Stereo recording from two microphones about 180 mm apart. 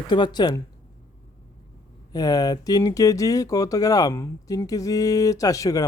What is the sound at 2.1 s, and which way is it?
Speech, 20° left (ahead or behind).